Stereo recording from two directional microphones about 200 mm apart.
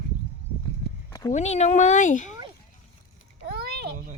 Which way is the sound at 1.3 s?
35° left (ahead or behind).